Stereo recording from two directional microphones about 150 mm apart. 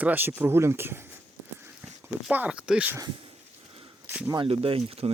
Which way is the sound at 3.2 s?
40° right (ahead or behind).